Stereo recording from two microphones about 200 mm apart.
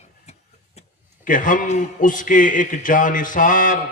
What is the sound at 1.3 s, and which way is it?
A man's voice, 40° left (ahead or behind).